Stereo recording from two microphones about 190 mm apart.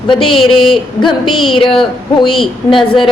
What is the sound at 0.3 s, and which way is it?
Speech, centre (ahead or behind).